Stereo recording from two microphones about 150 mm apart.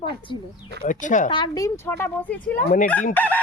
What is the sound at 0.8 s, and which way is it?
Speech, 60° left (ahead or behind).